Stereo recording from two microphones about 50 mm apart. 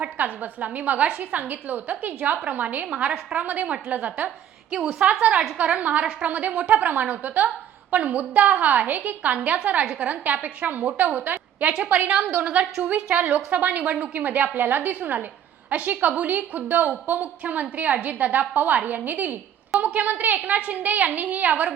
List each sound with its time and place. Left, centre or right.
0.0 s a woman's voice: right
2.8 s a woman's voice: centre
4.7 s a woman's voice: centre
5.2 s a woman's voice: right